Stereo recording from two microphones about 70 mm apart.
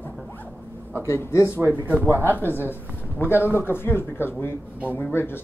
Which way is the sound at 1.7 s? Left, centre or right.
Right.